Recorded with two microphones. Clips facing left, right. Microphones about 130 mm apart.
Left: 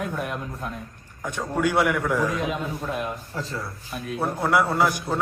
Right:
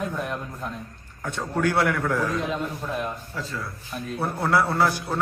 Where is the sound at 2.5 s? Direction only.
Centre (ahead or behind).